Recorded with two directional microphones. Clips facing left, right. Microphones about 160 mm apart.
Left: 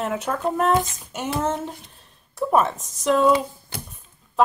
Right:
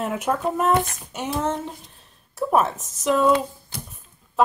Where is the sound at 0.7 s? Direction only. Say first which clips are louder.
Even; 65° right (ahead or behind).